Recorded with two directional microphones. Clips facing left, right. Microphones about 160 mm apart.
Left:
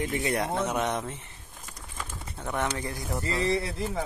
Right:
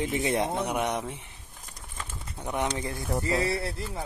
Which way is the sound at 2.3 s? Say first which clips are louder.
Right 1 dB; 15° right (ahead or behind).